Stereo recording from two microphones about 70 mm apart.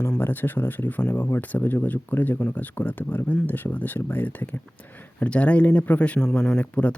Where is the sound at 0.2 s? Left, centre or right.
Left.